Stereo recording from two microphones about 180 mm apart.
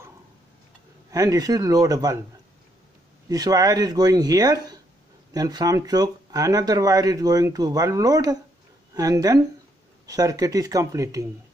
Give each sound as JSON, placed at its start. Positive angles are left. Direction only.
{"t": 1.1, "sound": "speech", "side_deg": -20}
{"t": 3.3, "sound": "speech", "side_deg": -20}